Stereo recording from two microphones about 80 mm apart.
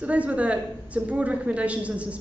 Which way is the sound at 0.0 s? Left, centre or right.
Centre.